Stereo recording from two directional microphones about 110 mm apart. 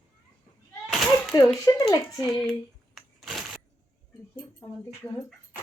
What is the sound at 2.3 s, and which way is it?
Child singing, centre (ahead or behind).